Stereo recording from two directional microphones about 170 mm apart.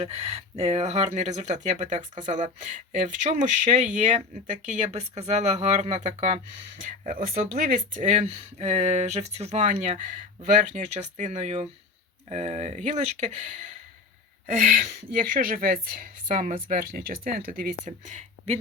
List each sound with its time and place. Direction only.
0.0 s speech: 35° right (ahead or behind)
7.0 s speech: 55° right (ahead or behind)